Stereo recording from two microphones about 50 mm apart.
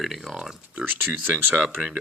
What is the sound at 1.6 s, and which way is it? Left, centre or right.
Speech, centre.